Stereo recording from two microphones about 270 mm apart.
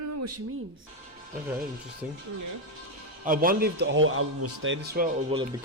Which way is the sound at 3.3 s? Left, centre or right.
Right.